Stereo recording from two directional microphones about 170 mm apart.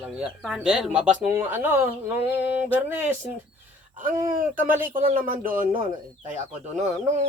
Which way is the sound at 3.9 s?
50° right (ahead or behind).